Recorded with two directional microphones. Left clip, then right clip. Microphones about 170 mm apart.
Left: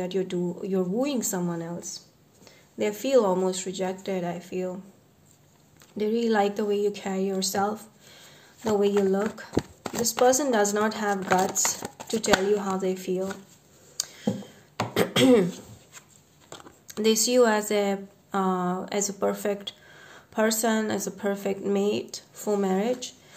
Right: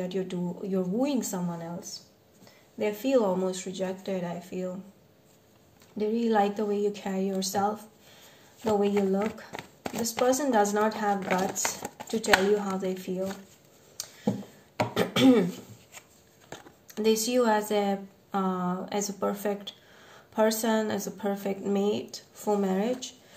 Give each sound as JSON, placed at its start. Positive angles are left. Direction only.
{"t": 0.0, "sound": "a woman's voice", "side_deg": 25}
{"t": 2.8, "sound": "a woman's voice", "side_deg": 35}
{"t": 5.9, "sound": "a woman's voice", "side_deg": 35}
{"t": 9.2, "sound": "speech", "side_deg": 25}
{"t": 13.9, "sound": "a sound", "side_deg": 30}
{"t": 15.0, "sound": "speech", "side_deg": 30}
{"t": 17.0, "sound": "a woman's voice", "side_deg": 30}